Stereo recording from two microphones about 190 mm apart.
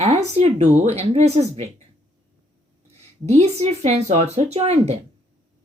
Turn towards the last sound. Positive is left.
turn(degrees=-35)  # may be behind; listen again after turning